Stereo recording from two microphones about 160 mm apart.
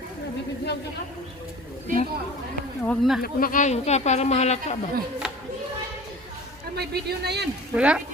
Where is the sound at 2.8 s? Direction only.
Centre (ahead or behind).